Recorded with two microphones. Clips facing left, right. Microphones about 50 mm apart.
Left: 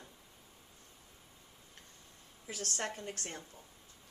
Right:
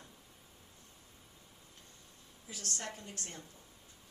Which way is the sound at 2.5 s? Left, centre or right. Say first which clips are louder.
Left 4 dB; left.